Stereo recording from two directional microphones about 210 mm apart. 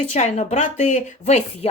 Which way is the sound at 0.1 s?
30° left (ahead or behind).